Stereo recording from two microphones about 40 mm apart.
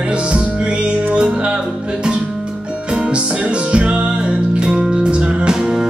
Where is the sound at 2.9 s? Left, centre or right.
Right.